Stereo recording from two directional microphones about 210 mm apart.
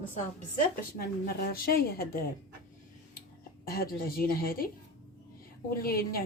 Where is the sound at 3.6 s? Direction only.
45° left (ahead or behind).